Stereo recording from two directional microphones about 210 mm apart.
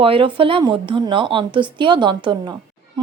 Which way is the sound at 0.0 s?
25° right (ahead or behind).